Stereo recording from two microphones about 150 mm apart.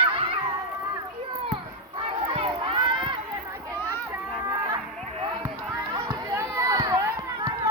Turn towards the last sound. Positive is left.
turn(degrees=-20)  # may be behind; listen again after turning